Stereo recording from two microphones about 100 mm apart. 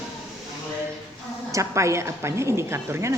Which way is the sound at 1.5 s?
30° right (ahead or behind).